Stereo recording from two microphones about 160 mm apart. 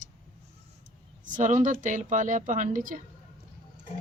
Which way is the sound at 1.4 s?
50° right (ahead or behind).